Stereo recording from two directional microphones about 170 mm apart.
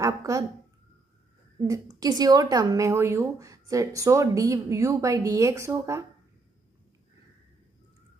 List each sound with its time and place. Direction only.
0.0 s speech: 20° right (ahead or behind)
1.6 s a woman's voice: 20° right (ahead or behind)